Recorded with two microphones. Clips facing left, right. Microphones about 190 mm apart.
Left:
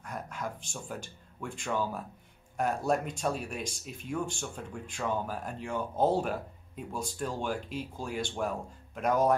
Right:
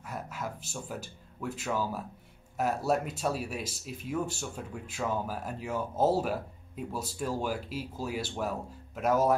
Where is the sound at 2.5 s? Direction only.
5° right (ahead or behind).